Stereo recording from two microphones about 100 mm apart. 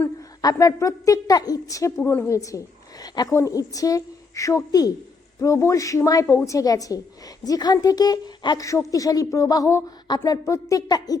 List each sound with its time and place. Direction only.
0.2 s a woman's voice: 35° left (ahead or behind)